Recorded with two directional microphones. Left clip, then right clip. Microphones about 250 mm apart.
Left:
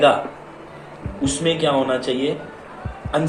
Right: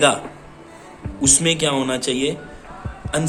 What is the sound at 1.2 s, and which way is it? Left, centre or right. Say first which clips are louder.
A man's voice: right 1 dB; right.